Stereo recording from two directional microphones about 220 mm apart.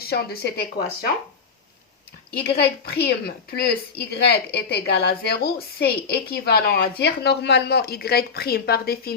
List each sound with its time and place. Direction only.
0.0 s a woman's voice: 45° left (ahead or behind)
2.5 s a woman's voice: 45° left (ahead or behind)